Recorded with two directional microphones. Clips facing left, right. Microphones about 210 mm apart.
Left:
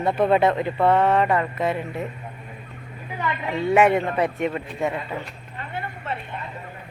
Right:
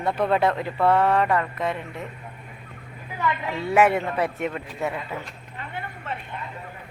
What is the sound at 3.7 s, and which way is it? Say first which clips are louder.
Speech: left 1 dB; centre (ahead or behind).